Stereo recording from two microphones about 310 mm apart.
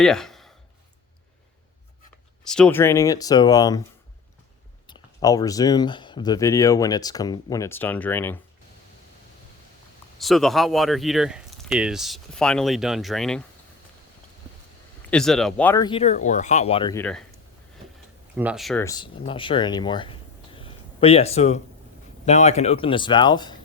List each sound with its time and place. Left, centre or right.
0.0 s speech: centre
2.4 s speech: centre
4.9 s speech: centre
10.2 s speech: centre
15.1 s speech: centre
18.3 s speech: centre